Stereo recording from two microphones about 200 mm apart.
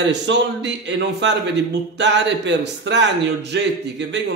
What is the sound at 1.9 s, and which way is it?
A man's voice, 60° right (ahead or behind).